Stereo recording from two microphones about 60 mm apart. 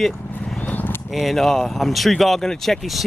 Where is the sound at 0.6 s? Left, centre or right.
Left.